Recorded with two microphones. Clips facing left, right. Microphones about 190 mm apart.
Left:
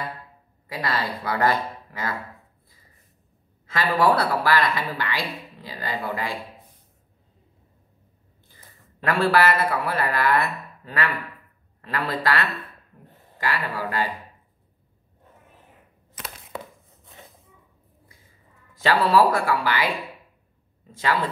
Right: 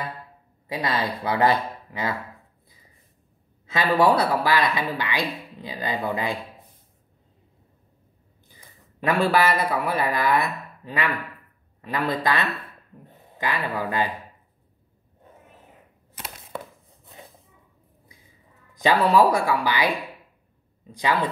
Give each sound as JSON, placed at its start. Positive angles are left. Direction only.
{"t": 0.7, "sound": "speech", "side_deg": -20}
{"t": 3.7, "sound": "speech", "side_deg": -20}
{"t": 8.5, "sound": "a sound", "side_deg": -15}
{"t": 9.2, "sound": "a man's voice", "side_deg": -15}
{"t": 18.8, "sound": "speech", "side_deg": -15}